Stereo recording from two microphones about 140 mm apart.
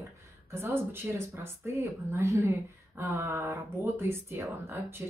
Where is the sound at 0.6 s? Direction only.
15° right (ahead or behind).